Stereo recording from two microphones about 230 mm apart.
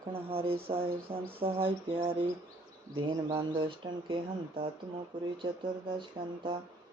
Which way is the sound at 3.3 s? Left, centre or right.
Right.